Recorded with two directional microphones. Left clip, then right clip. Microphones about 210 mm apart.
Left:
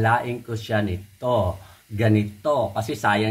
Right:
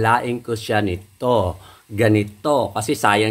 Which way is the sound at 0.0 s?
45° right (ahead or behind).